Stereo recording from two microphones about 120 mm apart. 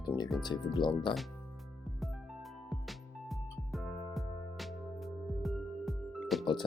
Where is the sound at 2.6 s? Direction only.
Centre (ahead or behind).